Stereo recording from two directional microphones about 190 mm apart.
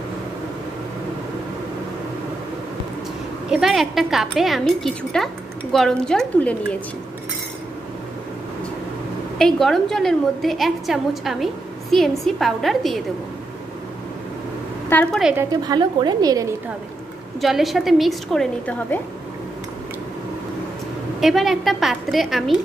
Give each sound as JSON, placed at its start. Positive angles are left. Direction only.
{"t": 3.4, "sound": "a woman's voice", "side_deg": 0}
{"t": 9.4, "sound": "a woman's voice", "side_deg": 0}
{"t": 14.9, "sound": "a woman's voice", "side_deg": 5}
{"t": 15.3, "sound": "a woman's voice", "side_deg": -20}
{"t": 17.4, "sound": "a woman's voice", "side_deg": 0}
{"t": 21.2, "sound": "a woman's voice", "side_deg": 0}